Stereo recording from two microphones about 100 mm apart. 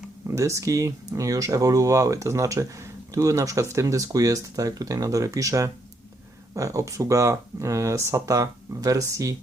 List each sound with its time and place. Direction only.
0.3 s speech: 30° right (ahead or behind)